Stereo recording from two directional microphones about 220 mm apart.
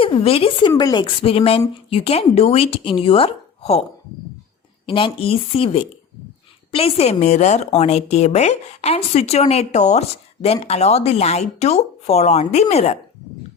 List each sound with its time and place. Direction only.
0.0 s a woman's voice: 25° left (ahead or behind)
4.9 s a woman's voice: 25° left (ahead or behind)